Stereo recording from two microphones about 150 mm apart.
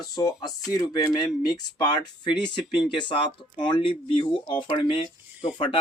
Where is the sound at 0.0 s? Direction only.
25° left (ahead or behind).